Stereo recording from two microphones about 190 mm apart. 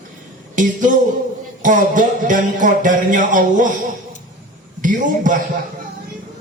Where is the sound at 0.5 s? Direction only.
45° right (ahead or behind).